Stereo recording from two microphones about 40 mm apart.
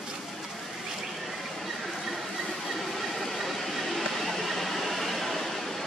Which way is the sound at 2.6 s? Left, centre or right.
Centre.